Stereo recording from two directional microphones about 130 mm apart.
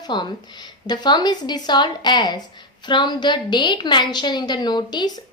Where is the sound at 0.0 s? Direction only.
35° left (ahead or behind).